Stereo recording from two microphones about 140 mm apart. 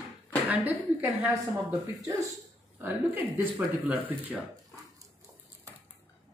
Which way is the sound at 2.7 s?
15° right (ahead or behind).